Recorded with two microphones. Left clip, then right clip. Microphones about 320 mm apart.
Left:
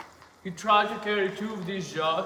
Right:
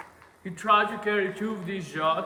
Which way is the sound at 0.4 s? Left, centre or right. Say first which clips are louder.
Even; centre.